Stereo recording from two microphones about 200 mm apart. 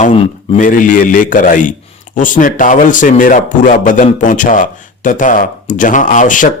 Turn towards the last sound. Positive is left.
turn(degrees=40)  # may be behind; listen again after turning